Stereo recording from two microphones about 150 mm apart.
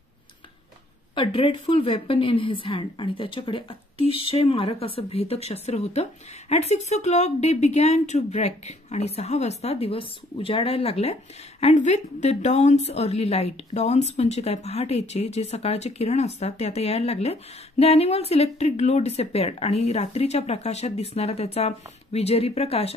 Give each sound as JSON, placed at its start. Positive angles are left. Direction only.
{"t": 1.1, "sound": "a woman's voice", "side_deg": 35}